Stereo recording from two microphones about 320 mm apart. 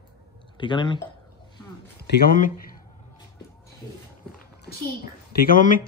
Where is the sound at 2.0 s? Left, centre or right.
Left.